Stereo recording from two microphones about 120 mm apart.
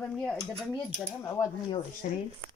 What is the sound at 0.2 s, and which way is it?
Speech, 5° left (ahead or behind).